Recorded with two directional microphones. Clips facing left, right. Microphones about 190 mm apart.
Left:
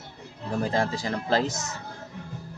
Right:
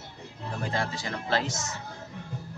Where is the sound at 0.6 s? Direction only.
40° left (ahead or behind).